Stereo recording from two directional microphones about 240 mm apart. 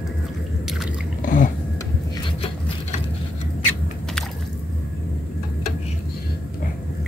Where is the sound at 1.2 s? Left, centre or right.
Left.